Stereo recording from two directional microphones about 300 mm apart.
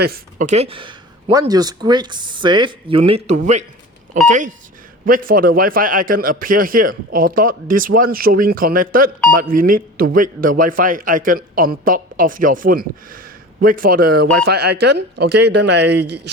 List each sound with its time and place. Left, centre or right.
0.0 s a man's voice: right